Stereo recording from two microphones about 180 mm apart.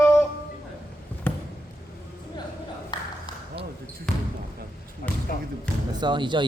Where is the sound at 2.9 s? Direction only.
25° left (ahead or behind).